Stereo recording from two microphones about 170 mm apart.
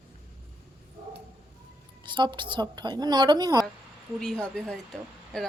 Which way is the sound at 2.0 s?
25° right (ahead or behind).